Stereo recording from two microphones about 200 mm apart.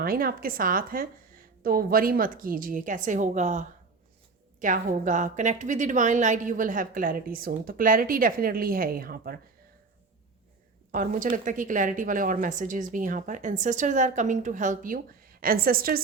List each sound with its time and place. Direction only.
0.0 s a woman's voice: 45° right (ahead or behind)
10.9 s a woman's voice: 45° right (ahead or behind)